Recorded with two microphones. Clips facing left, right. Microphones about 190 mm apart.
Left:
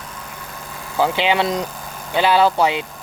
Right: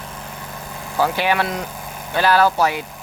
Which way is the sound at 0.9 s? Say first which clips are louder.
Left 1 dB; 20° left (ahead or behind).